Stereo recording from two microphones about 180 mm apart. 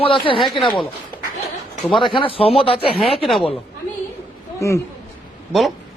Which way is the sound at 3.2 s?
Centre (ahead or behind).